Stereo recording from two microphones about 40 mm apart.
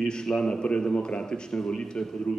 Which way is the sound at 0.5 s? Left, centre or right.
Left.